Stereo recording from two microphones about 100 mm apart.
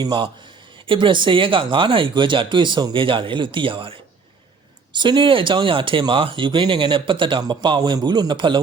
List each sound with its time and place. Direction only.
0.0 s a man's voice: 50° right (ahead or behind)
4.9 s a man's voice: 50° right (ahead or behind)